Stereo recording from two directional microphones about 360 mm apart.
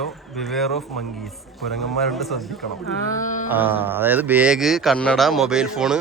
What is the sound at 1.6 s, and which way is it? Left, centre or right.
Speech, centre.